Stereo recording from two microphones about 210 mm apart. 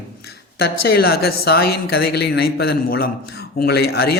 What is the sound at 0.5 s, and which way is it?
A man's voice, 50° left (ahead or behind).